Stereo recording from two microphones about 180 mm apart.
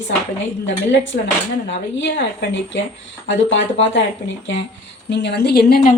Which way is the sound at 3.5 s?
90° left.